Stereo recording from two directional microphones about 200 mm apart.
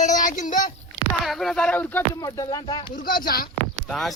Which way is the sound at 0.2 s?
40° left (ahead or behind).